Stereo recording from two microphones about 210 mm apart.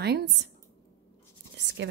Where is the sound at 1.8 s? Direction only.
55° right (ahead or behind).